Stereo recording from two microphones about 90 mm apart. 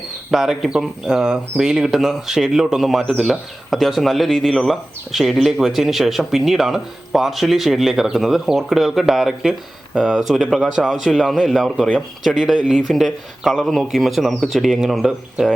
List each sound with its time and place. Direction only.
0.3 s speech: 5° right (ahead or behind)